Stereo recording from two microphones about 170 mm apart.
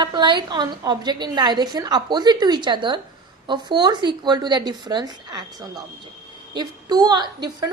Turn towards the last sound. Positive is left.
turn(degrees=-25)  # may be behind; listen again after turning